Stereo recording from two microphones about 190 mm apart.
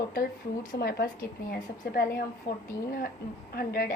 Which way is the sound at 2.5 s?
50° left (ahead or behind).